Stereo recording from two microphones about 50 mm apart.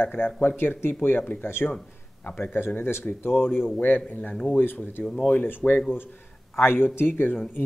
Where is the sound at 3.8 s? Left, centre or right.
Left.